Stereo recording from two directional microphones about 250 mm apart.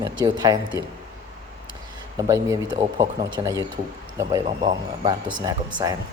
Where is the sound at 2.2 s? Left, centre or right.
Centre.